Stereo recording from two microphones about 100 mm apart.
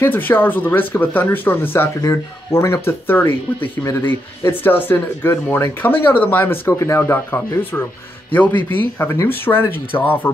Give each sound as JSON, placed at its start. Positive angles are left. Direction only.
{"t": 0.0, "sound": "speech", "side_deg": 20}
{"t": 2.0, "sound": "speech", "side_deg": 35}